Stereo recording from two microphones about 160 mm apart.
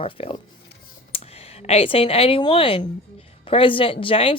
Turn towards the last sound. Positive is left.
turn(degrees=35)  # may be behind; listen again after turning